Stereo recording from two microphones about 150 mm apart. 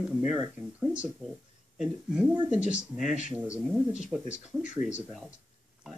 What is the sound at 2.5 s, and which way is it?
Speech, 50° left (ahead or behind).